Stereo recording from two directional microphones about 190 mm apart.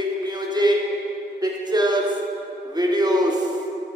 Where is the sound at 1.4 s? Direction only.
20° right (ahead or behind).